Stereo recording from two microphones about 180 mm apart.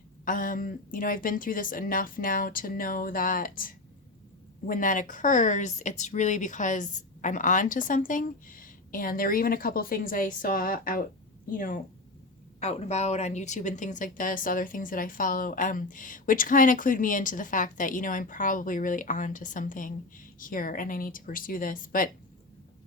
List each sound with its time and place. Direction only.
0.3 s speech: 50° left (ahead or behind)
12.5 s speech: 40° left (ahead or behind)